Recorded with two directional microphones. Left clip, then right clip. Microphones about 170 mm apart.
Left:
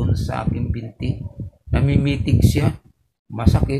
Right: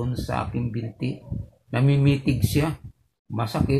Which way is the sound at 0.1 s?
5° left (ahead or behind).